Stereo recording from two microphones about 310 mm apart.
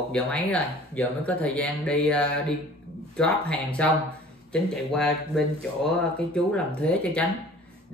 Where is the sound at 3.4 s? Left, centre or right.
Centre.